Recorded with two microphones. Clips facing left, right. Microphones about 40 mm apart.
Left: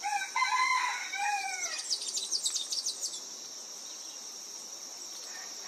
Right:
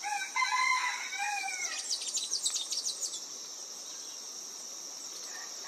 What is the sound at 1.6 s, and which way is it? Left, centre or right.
Bird, right.